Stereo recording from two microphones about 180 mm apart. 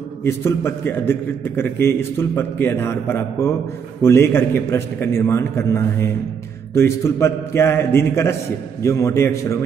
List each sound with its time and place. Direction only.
0.2 s a man's voice: 15° left (ahead or behind)